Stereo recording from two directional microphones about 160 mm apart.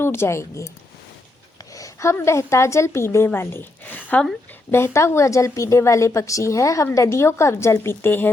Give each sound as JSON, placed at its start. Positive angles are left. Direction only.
{"t": 0.0, "sound": "a woman's voice", "side_deg": 15}
{"t": 1.7, "sound": "a woman's voice", "side_deg": 20}